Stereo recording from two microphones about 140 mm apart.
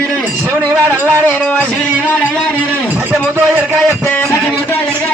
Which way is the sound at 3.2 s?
15° right (ahead or behind).